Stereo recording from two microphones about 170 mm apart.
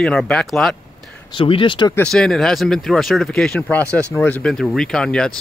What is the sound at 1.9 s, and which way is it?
Speech, 5° left (ahead or behind).